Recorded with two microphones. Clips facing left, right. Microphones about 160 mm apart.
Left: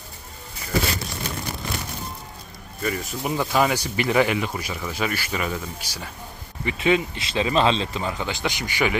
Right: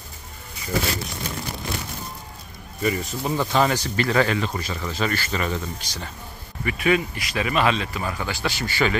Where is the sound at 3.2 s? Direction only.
10° left (ahead or behind).